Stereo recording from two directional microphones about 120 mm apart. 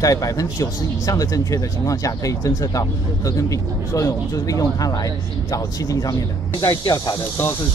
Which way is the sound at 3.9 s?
30° left (ahead or behind).